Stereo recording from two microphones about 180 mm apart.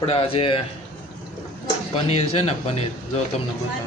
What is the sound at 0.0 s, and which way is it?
Speech, 30° left (ahead or behind).